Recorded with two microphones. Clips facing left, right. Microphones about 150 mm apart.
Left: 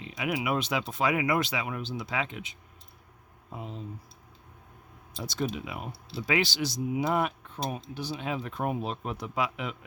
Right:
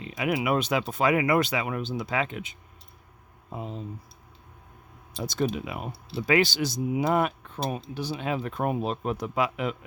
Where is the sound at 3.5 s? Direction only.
35° right (ahead or behind).